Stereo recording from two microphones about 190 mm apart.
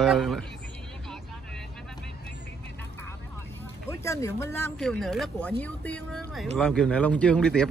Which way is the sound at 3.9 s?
15° left (ahead or behind).